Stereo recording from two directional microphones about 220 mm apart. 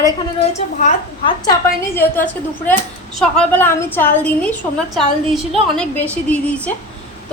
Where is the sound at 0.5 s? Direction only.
35° left (ahead or behind).